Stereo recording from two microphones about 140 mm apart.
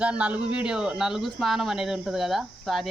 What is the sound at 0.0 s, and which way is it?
Speech, 10° right (ahead or behind).